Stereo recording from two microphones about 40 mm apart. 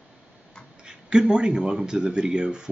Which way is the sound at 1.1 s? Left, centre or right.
Centre.